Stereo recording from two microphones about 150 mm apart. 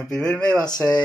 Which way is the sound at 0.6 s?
25° left (ahead or behind).